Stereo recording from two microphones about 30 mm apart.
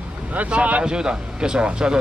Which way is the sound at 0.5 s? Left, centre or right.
Right.